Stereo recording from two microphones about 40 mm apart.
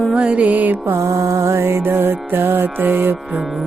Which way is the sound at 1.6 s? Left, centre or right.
Right.